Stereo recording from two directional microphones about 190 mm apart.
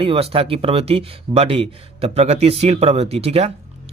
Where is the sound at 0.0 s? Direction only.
30° right (ahead or behind).